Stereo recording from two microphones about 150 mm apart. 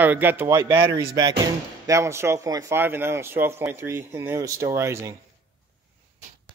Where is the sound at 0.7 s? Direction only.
30° right (ahead or behind).